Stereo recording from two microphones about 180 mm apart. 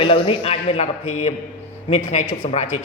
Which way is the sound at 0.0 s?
30° left (ahead or behind).